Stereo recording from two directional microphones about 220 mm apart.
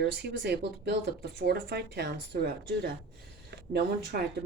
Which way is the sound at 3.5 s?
50° right (ahead or behind).